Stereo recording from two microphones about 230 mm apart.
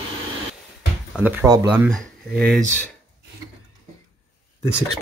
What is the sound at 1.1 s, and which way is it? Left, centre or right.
Speech, centre.